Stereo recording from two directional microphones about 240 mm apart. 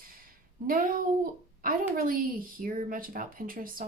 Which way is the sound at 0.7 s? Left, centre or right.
Right.